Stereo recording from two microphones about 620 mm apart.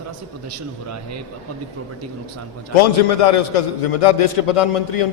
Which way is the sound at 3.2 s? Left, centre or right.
Left.